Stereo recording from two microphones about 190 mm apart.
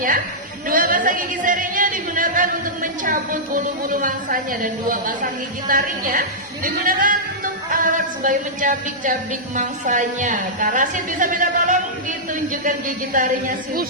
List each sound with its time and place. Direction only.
0.7 s a woman's voice: 45° right (ahead or behind)